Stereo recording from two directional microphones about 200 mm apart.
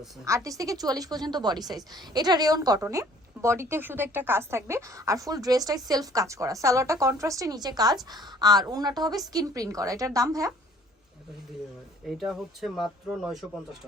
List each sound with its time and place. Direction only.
0.3 s a woman's voice: 15° right (ahead or behind)
12.0 s speech: centre (ahead or behind)